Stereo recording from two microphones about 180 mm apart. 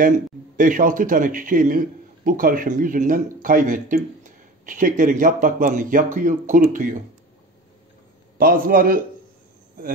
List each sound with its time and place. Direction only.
0.6 s a man's voice: 50° right (ahead or behind)
8.4 s a man's voice: 50° right (ahead or behind)